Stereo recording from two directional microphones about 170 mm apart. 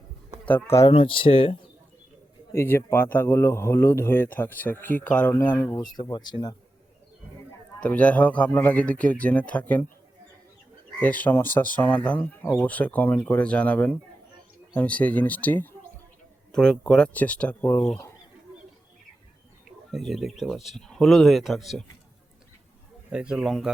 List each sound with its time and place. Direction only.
0.4 s a man's voice: 15° left (ahead or behind)
0.9 s speech: 30° left (ahead or behind)
2.5 s a man's voice: 15° left (ahead or behind)
6.0 s speech: 25° left (ahead or behind)
7.8 s a man's voice: 10° left (ahead or behind)
11.0 s a man's voice: 10° left (ahead or behind)
19.9 s speech: centre (ahead or behind)
23.0 s speech: 5° right (ahead or behind)